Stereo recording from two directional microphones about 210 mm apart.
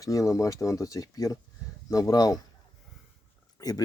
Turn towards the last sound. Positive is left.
turn(degrees=15)  # may be behind; listen again after turning